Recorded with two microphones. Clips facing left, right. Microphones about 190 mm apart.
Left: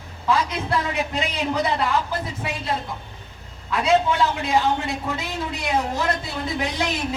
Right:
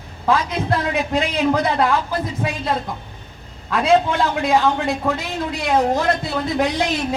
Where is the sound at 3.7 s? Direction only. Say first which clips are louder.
Right 3 dB; 55° right (ahead or behind).